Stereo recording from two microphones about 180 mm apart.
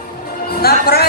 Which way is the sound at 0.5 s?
60° left (ahead or behind).